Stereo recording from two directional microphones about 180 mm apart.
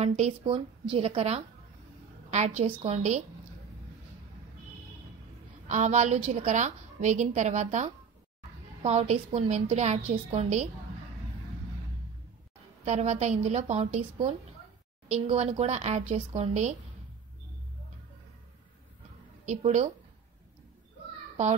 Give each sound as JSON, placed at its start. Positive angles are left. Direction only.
{"t": 0.0, "sound": "a woman's voice", "side_deg": -35}
{"t": 5.7, "sound": "a woman's voice", "side_deg": -40}
{"t": 12.8, "sound": "a woman's voice", "side_deg": -40}
{"t": 19.4, "sound": "a woman's voice", "side_deg": -40}